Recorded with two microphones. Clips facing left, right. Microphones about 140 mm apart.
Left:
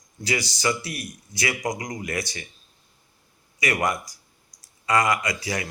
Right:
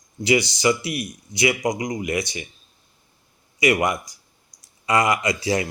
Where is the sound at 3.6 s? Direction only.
20° right (ahead or behind).